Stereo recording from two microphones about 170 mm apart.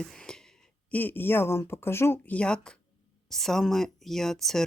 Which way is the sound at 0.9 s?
10° left (ahead or behind).